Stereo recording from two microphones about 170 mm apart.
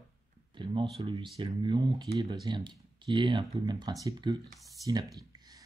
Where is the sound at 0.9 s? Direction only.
30° right (ahead or behind).